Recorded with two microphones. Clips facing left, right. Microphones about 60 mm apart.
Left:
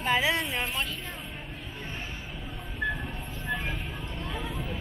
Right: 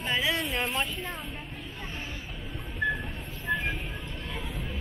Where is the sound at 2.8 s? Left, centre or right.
Centre.